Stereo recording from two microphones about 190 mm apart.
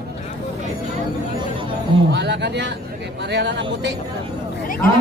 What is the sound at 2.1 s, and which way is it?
Speech, 65° right (ahead or behind).